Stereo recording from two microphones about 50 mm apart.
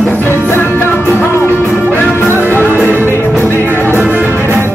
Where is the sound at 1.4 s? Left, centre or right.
Left.